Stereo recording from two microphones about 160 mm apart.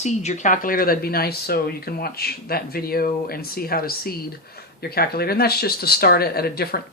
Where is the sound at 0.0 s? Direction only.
45° left (ahead or behind).